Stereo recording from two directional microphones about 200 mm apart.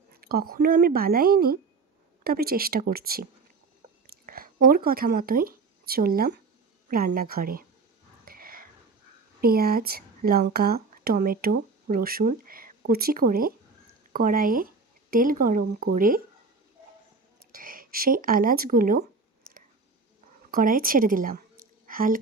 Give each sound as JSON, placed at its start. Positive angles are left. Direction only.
{"t": 0.1, "sound": "speech", "side_deg": -50}
{"t": 8.2, "sound": "whispering", "side_deg": -45}
{"t": 9.4, "sound": "speech", "side_deg": -50}
{"t": 17.5, "sound": "speech", "side_deg": -45}
{"t": 20.5, "sound": "speech", "side_deg": -45}
{"t": 21.8, "sound": "a sound", "side_deg": -45}